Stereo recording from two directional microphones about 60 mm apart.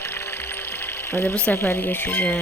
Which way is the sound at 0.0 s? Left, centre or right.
Left.